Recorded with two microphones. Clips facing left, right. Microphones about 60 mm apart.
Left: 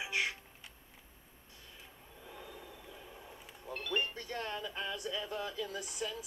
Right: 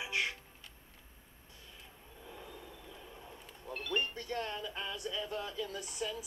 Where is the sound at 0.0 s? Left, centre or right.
Centre.